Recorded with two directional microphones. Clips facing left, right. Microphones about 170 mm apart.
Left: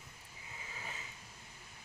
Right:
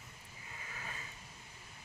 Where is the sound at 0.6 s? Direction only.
15° left (ahead or behind).